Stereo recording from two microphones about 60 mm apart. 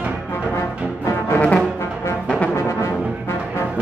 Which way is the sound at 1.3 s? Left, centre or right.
Left.